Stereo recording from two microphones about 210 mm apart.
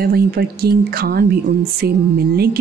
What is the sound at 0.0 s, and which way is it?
A woman's voice, 45° right (ahead or behind).